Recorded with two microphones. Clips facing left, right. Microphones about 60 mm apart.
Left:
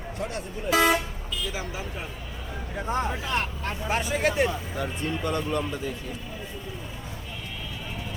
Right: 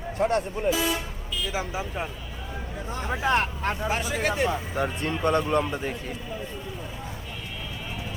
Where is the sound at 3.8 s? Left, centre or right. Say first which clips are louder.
Left 3 dB; centre.